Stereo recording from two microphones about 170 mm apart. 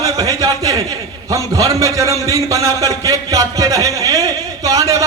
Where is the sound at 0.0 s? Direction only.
20° right (ahead or behind).